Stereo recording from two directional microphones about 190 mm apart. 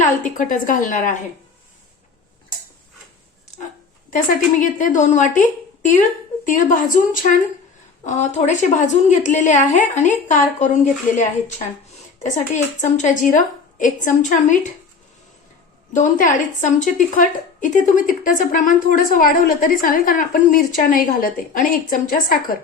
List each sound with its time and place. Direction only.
0.0 s a woman's voice: 40° left (ahead or behind)
4.1 s a woman's voice: 45° left (ahead or behind)
12.8 s a woman's voice: 40° left (ahead or behind)
15.9 s a woman's voice: 40° left (ahead or behind)